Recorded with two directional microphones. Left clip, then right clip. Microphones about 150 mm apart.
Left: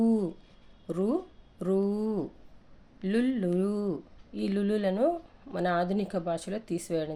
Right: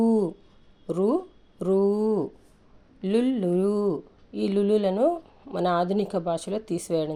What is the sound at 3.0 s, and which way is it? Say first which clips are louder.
Speech: right 5 dB; 25° right (ahead or behind).